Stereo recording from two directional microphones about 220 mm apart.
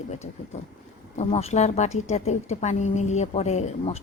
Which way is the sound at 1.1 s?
30° left (ahead or behind).